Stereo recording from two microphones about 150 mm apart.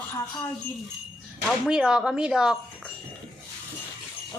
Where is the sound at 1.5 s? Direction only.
5° right (ahead or behind).